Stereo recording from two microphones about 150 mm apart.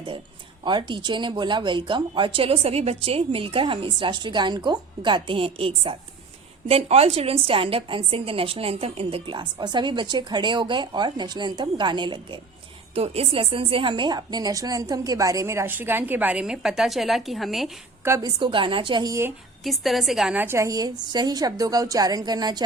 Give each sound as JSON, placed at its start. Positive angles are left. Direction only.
{"t": 0.6, "sound": "a woman's voice", "side_deg": -30}
{"t": 12.9, "sound": "a woman's voice", "side_deg": -40}
{"t": 18.0, "sound": "a woman's voice", "side_deg": -20}
{"t": 18.3, "sound": "a woman's voice", "side_deg": -35}
{"t": 19.6, "sound": "a woman's voice", "side_deg": 0}